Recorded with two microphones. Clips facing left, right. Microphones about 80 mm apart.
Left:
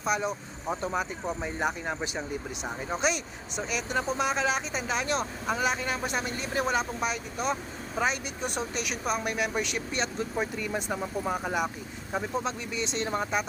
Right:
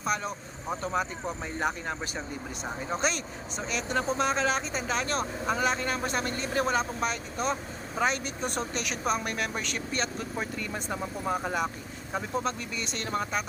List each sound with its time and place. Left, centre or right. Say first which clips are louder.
0.0 s speech: left 2 dB; centre
0.9 s speech: right 3 dB; centre
12.1 s speech: even; centre